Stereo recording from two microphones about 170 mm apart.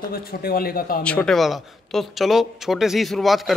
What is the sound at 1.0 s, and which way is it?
Speech, 5° left (ahead or behind).